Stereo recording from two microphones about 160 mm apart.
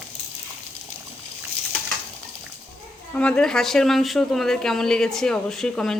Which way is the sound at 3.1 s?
5° left (ahead or behind).